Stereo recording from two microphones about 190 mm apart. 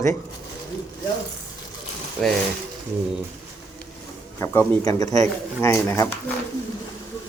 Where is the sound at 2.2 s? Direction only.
Centre (ahead or behind).